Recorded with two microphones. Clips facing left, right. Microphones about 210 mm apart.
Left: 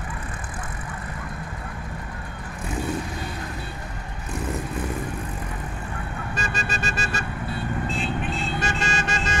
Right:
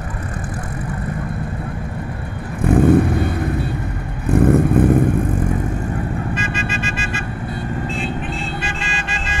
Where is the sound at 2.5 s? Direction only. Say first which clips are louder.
Right 15 dB; 60° right (ahead or behind).